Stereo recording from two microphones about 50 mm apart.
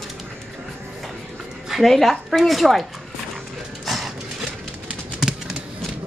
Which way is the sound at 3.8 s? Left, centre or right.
Centre.